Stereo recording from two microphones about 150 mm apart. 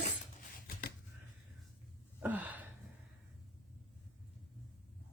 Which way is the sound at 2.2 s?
10° right (ahead or behind).